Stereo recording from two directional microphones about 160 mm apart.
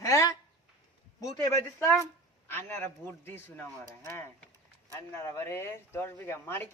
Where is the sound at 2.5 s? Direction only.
15° left (ahead or behind).